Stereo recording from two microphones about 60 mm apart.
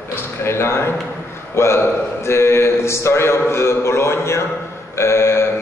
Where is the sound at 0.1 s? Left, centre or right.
Left.